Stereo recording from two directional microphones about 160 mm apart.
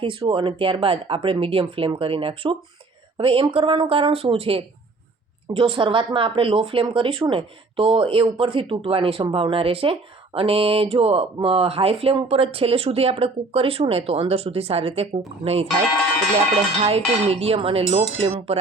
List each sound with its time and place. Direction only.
0.0 s speech: 35° right (ahead or behind)
16.8 s speech: 40° right (ahead or behind)